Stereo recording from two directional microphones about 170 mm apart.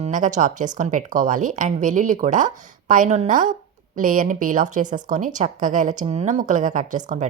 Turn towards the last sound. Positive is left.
turn(degrees=-45)  # may be behind; listen again after turning